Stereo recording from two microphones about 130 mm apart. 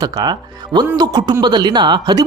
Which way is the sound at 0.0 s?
35° right (ahead or behind).